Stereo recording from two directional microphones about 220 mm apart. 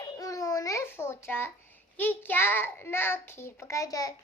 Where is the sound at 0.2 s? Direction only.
15° left (ahead or behind).